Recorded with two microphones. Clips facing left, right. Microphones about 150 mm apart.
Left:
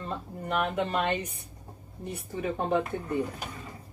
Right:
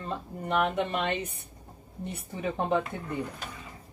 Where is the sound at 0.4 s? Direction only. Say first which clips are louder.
Right 2 dB; 20° right (ahead or behind).